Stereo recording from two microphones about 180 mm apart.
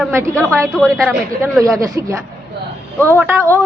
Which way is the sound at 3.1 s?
15° right (ahead or behind).